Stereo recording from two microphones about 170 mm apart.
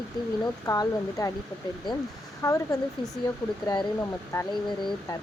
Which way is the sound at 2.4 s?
20° left (ahead or behind).